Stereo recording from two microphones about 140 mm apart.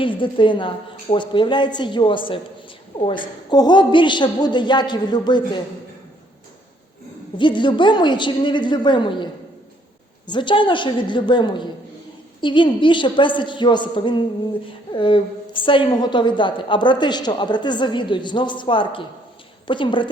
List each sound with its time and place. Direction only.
0.0 s a woman's voice: 35° left (ahead or behind)
7.3 s a woman's voice: 35° left (ahead or behind)